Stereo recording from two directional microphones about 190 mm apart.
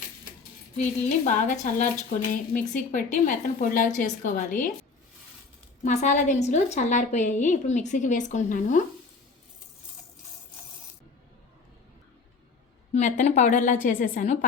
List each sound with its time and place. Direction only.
0.8 s speech: 40° left (ahead or behind)
5.8 s a woman's voice: 40° left (ahead or behind)
12.9 s a woman's voice: 40° left (ahead or behind)